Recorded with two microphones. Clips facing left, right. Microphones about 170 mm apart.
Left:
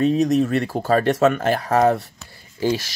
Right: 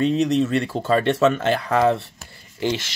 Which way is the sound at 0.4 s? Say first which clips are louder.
Left 1 dB; 25° right (ahead or behind).